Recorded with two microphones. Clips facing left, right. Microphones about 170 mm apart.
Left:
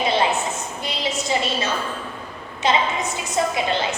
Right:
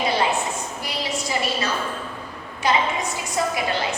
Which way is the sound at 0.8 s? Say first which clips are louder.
Left 4 dB; 25° left (ahead or behind).